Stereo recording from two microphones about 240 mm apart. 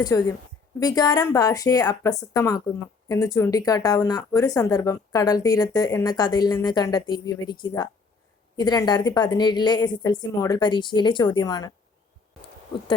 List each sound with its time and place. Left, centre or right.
0.0 s speech: centre